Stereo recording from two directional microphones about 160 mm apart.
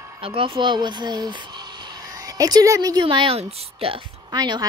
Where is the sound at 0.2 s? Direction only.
35° right (ahead or behind).